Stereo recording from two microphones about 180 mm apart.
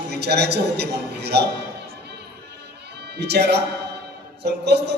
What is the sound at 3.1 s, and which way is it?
Speech, 65° right (ahead or behind).